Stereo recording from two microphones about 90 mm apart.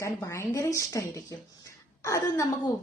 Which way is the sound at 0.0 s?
30° left (ahead or behind).